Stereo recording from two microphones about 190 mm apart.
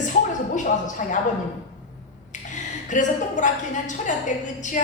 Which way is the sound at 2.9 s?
40° left (ahead or behind).